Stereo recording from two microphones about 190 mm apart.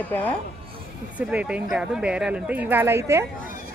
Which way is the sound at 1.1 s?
5° right (ahead or behind).